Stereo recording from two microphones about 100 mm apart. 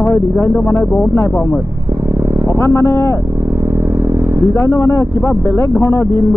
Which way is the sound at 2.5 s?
25° left (ahead or behind).